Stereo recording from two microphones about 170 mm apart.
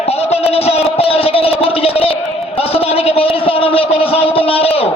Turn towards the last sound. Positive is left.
turn(degrees=35)  # may be behind; listen again after turning